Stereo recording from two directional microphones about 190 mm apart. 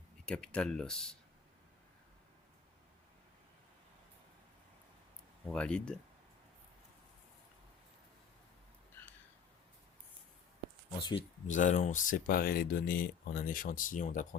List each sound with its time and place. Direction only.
0.3 s speech: 5° left (ahead or behind)
5.5 s speech: 5° left (ahead or behind)
11.0 s speech: 30° left (ahead or behind)
11.4 s speech: 40° left (ahead or behind)